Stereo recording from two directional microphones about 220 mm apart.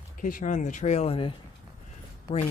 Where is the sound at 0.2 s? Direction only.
35° left (ahead or behind).